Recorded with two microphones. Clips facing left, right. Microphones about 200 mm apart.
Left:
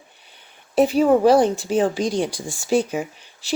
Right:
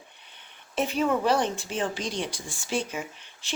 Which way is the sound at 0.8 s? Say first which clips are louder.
Left 10 dB; 35° left (ahead or behind).